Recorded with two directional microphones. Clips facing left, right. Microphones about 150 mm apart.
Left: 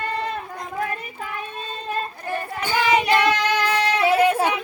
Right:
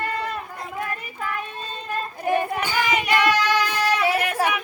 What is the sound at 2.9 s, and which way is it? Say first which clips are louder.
Yodeling: left 1 dB; 25° left (ahead or behind).